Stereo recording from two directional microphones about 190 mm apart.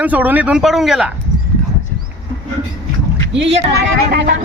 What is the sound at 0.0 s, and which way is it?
A man's voice, 10° right (ahead or behind).